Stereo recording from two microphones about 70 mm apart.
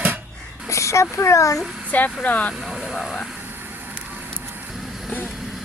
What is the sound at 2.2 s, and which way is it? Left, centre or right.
Speech, left.